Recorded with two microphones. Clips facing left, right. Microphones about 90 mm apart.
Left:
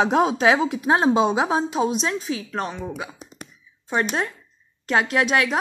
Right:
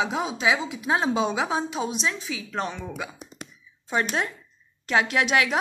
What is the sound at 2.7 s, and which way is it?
Speech, 15° left (ahead or behind).